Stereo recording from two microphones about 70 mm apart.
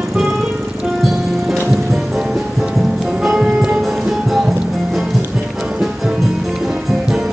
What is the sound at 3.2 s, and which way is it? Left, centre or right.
Music, centre.